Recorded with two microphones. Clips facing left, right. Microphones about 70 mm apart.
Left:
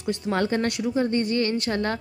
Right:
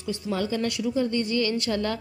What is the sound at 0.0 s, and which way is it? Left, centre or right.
A woman's voice, left.